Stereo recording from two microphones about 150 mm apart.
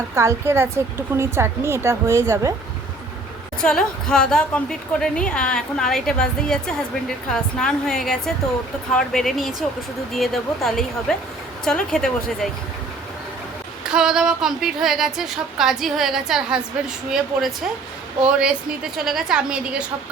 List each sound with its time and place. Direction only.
0.1 s speech: 20° right (ahead or behind)
3.6 s a woman's voice: 5° left (ahead or behind)
13.8 s a woman's voice: 5° right (ahead or behind)
18.3 s a woman's voice: 5° right (ahead or behind)